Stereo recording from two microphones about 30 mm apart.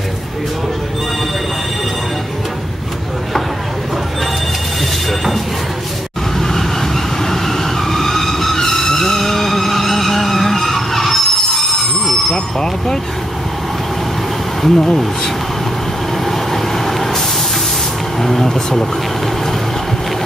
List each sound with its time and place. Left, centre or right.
6.3 s vehicle: centre
12.3 s speech: centre
14.6 s speech: centre
16.3 s vehicle: centre
18.2 s speech: centre